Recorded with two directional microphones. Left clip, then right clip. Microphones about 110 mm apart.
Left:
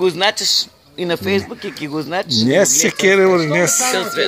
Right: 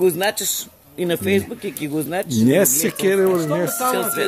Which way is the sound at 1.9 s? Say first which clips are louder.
Left 5 dB; 5° right (ahead or behind).